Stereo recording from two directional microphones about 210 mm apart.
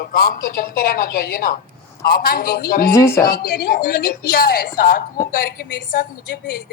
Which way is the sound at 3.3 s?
45° left (ahead or behind).